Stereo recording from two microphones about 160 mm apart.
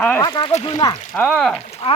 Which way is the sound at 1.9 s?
40° left (ahead or behind).